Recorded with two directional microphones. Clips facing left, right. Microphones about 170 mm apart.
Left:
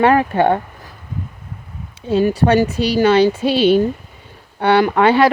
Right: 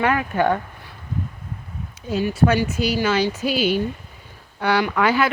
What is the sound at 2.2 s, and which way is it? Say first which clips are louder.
Speech: left 4 dB; 35° left (ahead or behind).